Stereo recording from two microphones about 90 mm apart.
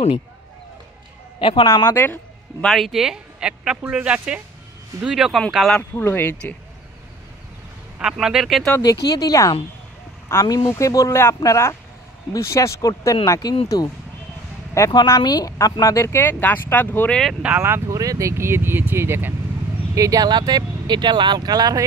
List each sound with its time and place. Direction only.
1.4 s a man's voice: 75° left (ahead or behind)
1.9 s speech: 25° left (ahead or behind)
2.6 s speech: centre (ahead or behind)
5.8 s speech: 20° left (ahead or behind)
8.0 s speech: 5° right (ahead or behind)
8.8 s speech: 45° left (ahead or behind)
14.8 s speech: 35° left (ahead or behind)
15.2 s speech: 45° left (ahead or behind); by 17.1 s 20° left (ahead or behind)
17.3 s speech: 10° right (ahead or behind)
17.8 s speech: 40° right (ahead or behind)
20.0 s speech: 45° right (ahead or behind)